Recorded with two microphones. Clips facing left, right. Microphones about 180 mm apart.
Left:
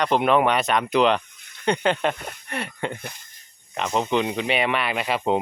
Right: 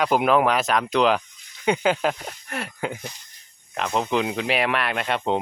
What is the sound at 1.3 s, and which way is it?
Snake, 60° left (ahead or behind).